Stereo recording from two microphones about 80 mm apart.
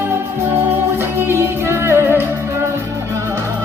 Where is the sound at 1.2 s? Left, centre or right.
Right.